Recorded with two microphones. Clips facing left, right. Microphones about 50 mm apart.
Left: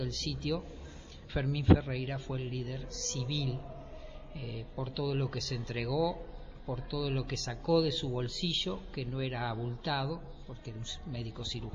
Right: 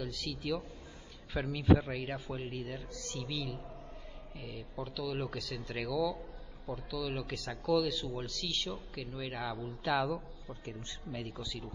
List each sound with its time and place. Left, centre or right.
0.0 s a man's voice: centre
2.3 s a man's voice: right
2.9 s a man's voice: centre
4.7 s a man's voice: centre
9.8 s a man's voice: right